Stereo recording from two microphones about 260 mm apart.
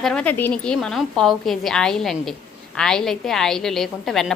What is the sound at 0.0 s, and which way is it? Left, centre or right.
A woman's voice, centre.